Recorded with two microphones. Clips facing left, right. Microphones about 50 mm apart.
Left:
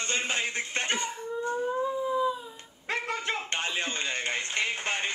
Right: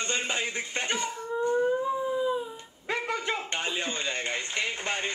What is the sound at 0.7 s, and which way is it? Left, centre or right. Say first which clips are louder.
Speech: even; left.